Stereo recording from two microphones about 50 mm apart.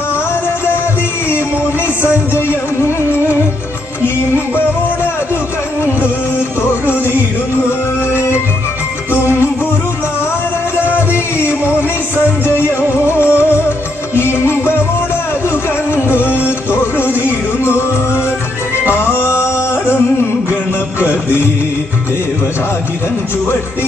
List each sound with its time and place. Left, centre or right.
8.1 s music: left
10.9 s music: left
12.9 s music: right
14.1 s music: left
15.9 s music: left
21.0 s music: left